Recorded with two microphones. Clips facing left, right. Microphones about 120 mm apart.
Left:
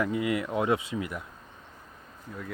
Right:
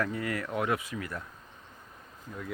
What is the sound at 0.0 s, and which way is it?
Speech, 15° left (ahead or behind).